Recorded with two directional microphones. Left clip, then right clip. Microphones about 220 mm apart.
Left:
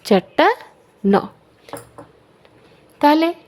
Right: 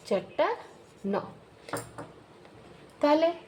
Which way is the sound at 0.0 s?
50° left (ahead or behind).